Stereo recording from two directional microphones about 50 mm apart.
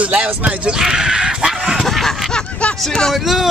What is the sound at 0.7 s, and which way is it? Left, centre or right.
Speech, centre.